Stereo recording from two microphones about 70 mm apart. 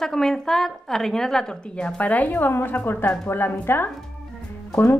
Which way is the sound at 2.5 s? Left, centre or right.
Left.